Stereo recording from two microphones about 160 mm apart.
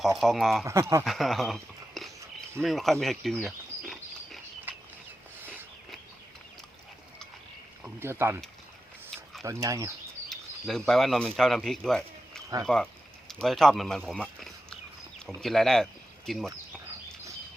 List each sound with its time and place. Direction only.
0.2 s speech: centre (ahead or behind)
0.6 s speech: 20° right (ahead or behind)
1.0 s speech: centre (ahead or behind)
3.4 s a sound: centre (ahead or behind)
7.9 s speech: 15° right (ahead or behind)
9.4 s speech: 20° right (ahead or behind)
10.2 s speech: centre (ahead or behind)